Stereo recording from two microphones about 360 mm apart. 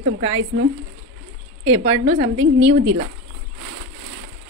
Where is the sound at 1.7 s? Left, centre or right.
Centre.